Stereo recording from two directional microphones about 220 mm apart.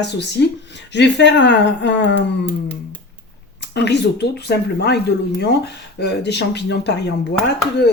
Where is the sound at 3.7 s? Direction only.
50° left (ahead or behind).